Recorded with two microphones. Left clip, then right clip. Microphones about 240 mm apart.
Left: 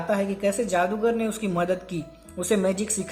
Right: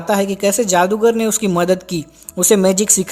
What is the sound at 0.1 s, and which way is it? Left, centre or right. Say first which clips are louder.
A woman's voice: right 9 dB; right.